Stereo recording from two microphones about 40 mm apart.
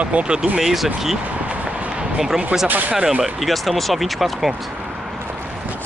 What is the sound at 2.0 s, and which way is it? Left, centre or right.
Basketball bounce, centre.